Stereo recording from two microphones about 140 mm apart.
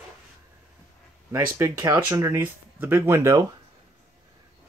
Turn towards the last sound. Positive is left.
turn(degrees=-20)  # may be behind; listen again after turning